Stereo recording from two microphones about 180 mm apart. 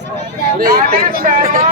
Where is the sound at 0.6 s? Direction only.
55° right (ahead or behind).